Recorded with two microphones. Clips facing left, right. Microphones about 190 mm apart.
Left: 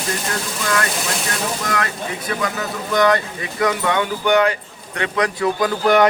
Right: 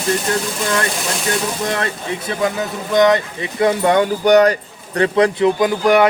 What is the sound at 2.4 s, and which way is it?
Speech, 20° right (ahead or behind).